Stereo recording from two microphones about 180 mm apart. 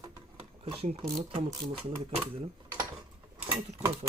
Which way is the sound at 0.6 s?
30° right (ahead or behind).